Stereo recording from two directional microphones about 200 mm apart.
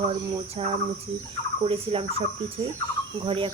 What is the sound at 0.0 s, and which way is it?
Speech, 30° right (ahead or behind).